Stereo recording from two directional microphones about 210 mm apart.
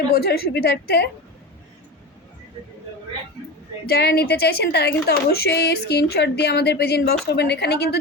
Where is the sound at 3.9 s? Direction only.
50° left (ahead or behind).